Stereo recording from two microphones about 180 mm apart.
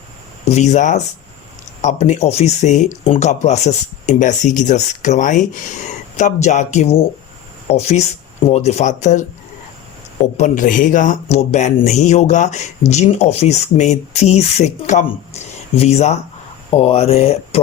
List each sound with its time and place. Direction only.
0.4 s speech: 40° left (ahead or behind)
10.3 s speech: 45° left (ahead or behind)